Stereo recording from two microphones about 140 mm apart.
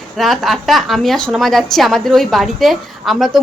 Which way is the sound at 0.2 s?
Centre (ahead or behind).